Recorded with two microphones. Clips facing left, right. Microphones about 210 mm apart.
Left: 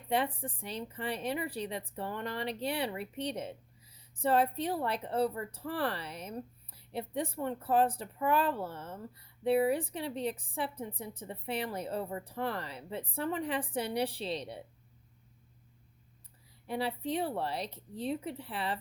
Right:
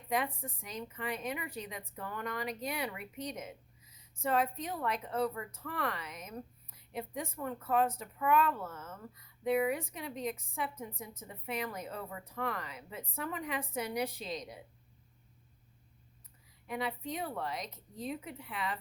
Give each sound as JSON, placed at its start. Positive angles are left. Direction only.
{"t": 0.1, "sound": "a woman's voice", "side_deg": 30}
{"t": 16.6, "sound": "a woman's voice", "side_deg": 30}